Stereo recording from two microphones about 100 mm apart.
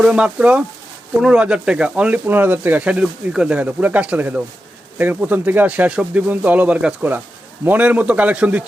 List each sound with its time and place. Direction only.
0.0 s speech: 10° right (ahead or behind)